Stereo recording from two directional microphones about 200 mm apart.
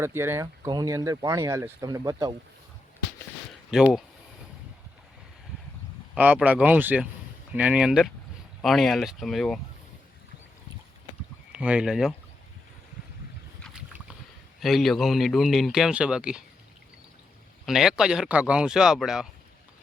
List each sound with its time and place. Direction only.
0.0 s speech: 10° right (ahead or behind)
3.7 s speech: 5° right (ahead or behind)
6.1 s speech: 10° right (ahead or behind)
11.5 s speech: 5° right (ahead or behind)
14.6 s speech: centre (ahead or behind)
17.7 s speech: centre (ahead or behind)